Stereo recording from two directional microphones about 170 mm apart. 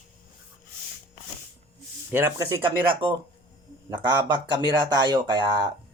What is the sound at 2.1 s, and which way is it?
Speech, 15° right (ahead or behind).